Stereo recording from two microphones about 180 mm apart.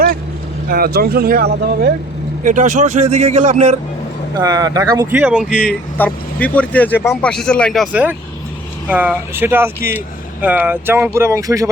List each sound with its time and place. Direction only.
0.7 s speech: 60° right (ahead or behind)
2.4 s a man's voice: 45° right (ahead or behind)
4.4 s speech: 20° right (ahead or behind)
6.0 s speech: 10° left (ahead or behind); by 11.7 s 15° right (ahead or behind)